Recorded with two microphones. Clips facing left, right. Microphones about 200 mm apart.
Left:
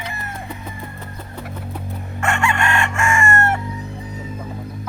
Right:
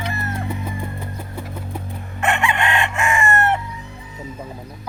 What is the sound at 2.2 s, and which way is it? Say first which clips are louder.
Chicken: even; 20° right (ahead or behind).